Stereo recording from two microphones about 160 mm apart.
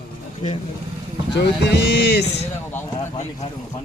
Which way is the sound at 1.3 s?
90° left.